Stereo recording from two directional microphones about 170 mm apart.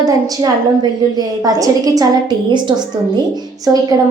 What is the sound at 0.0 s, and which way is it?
A woman's voice, 20° right (ahead or behind).